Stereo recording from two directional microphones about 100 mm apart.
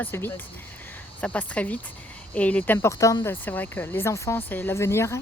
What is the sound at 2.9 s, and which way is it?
Speech, 35° left (ahead or behind).